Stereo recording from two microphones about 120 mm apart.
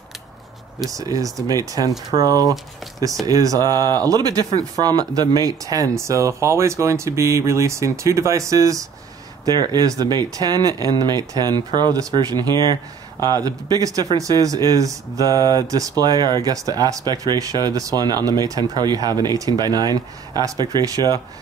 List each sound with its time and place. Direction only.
0.8 s speech: 30° right (ahead or behind)